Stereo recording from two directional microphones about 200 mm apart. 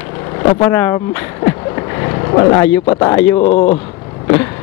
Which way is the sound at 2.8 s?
20° left (ahead or behind).